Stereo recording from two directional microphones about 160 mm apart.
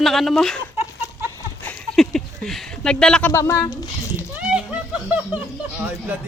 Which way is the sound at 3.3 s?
20° left (ahead or behind).